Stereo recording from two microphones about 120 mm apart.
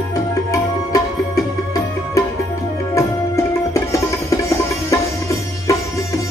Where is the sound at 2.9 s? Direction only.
25° left (ahead or behind).